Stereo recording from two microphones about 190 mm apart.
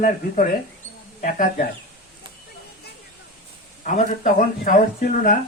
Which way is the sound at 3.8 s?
45° left (ahead or behind).